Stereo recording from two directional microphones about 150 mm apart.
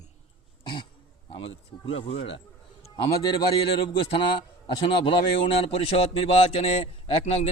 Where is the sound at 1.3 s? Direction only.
40° left (ahead or behind).